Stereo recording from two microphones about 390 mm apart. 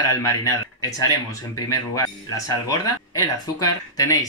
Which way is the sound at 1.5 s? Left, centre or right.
Centre.